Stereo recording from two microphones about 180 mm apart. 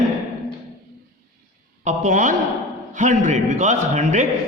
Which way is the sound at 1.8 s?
45° right (ahead or behind).